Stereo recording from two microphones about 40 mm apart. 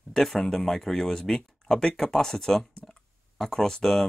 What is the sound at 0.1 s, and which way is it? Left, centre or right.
Speech, centre.